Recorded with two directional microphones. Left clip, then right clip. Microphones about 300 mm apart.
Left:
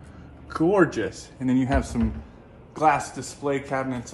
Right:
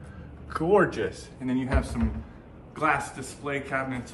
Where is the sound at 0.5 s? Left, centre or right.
Left.